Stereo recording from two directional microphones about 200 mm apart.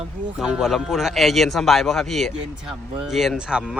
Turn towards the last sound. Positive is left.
turn(degrees=-5)  # may be behind; listen again after turning